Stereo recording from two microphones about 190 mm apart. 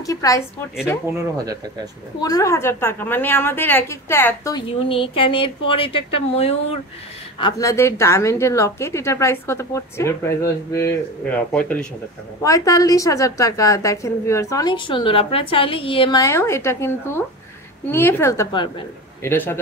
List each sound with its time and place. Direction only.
0.0 s a woman's voice: 15° left (ahead or behind)
1.0 s speech: 15° right (ahead or behind)
2.1 s a woman's voice: 20° left (ahead or behind)
4.6 s speech: 30° left (ahead or behind)
7.3 s a woman's voice: 20° left (ahead or behind)
12.4 s a woman's voice: 15° left (ahead or behind)